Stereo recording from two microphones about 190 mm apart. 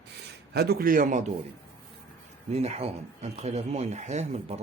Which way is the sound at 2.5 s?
35° right (ahead or behind).